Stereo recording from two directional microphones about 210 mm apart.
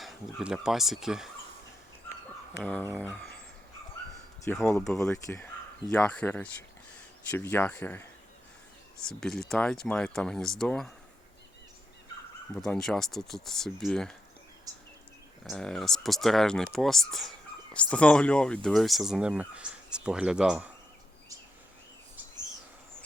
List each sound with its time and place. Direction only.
0.0 s speech: centre (ahead or behind)
3.0 s speech: 5° left (ahead or behind)
4.4 s speech: 10° left (ahead or behind)
9.0 s speech: centre (ahead or behind)
12.5 s speech: 5° left (ahead or behind)
14.7 s a sound: 15° right (ahead or behind)
15.4 s speech: centre (ahead or behind)